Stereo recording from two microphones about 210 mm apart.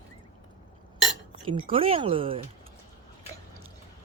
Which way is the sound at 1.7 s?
25° right (ahead or behind).